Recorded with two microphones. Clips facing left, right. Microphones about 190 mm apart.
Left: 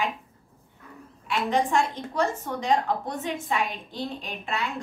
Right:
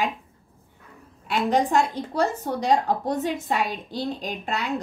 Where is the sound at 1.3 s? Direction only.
40° right (ahead or behind).